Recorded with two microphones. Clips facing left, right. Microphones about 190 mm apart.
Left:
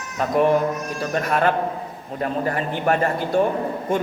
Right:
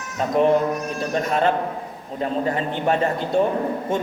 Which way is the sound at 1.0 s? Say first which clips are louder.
Left 1 dB; 25° right (ahead or behind).